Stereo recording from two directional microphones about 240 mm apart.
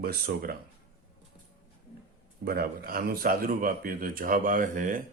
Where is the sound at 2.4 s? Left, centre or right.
Right.